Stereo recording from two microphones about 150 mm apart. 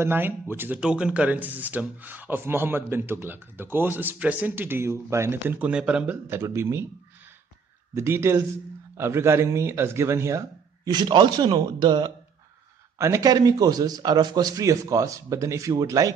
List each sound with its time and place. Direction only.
0.0 s speech: 15° right (ahead or behind)
6.2 s speech: 15° right (ahead or behind)
7.9 s speech: 15° right (ahead or behind)
10.9 s a man's voice: 30° right (ahead or behind)
12.9 s a man's voice: 20° right (ahead or behind)